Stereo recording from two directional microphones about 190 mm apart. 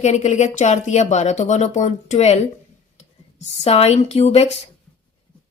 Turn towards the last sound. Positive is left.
turn(degrees=35)  # may be behind; listen again after turning